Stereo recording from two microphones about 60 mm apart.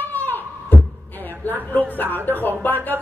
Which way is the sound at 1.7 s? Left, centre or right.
Left.